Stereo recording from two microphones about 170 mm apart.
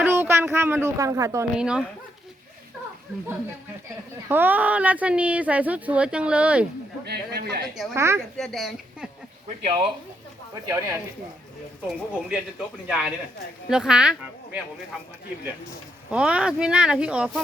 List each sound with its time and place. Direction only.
0.0 s speech: 15° right (ahead or behind)
1.5 s speech: 5° right (ahead or behind)
4.3 s speech: 10° right (ahead or behind)
7.0 s a man's voice: 70° right (ahead or behind)
7.7 s speech: centre (ahead or behind)
7.9 s speech: 15° right (ahead or behind)
8.4 s speech: centre (ahead or behind)
9.6 s speech: 30° right (ahead or behind)
10.7 s speech: 15° right (ahead or behind)
11.9 s speech: 5° right (ahead or behind)
16.1 s speech: 5° right (ahead or behind)